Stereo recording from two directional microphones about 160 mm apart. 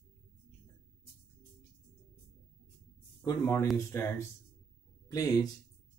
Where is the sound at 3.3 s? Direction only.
20° left (ahead or behind).